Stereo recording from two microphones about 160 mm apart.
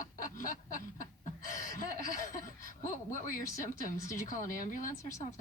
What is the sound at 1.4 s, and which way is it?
Chuckle, 55° left (ahead or behind).